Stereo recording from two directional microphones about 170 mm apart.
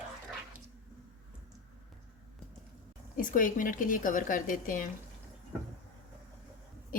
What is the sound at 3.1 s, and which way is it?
A woman's voice, 50° left (ahead or behind).